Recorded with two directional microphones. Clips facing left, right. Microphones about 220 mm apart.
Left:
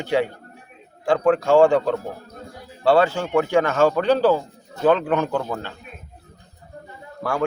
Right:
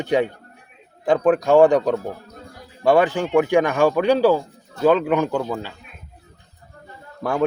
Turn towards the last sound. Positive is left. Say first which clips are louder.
# right 3 dB
turn(degrees=-20)  # may be behind; listen again after turning